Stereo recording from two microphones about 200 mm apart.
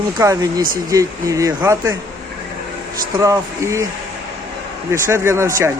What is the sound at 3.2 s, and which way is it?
Speech, 15° right (ahead or behind).